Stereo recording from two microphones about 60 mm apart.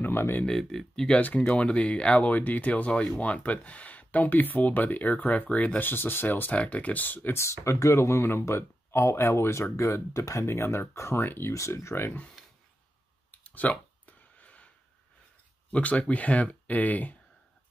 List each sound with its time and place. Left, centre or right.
0.0 s a sound: left
0.5 s speech: centre
1.4 s speech: centre
5.8 s speech: left
6.5 s speech: left
7.3 s speech: left
11.5 s speech: left
13.3 s clicking: left
15.7 s speech: left